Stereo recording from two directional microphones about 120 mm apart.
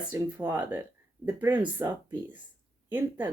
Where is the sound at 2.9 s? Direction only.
15° right (ahead or behind).